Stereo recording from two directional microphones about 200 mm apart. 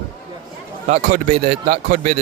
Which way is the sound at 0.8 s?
35° right (ahead or behind).